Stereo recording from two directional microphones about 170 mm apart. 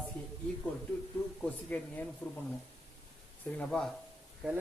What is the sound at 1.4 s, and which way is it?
Speech, 10° left (ahead or behind).